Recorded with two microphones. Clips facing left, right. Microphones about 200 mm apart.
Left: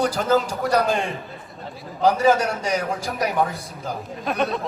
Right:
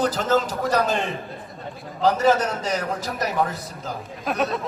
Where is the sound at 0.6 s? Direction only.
Centre (ahead or behind).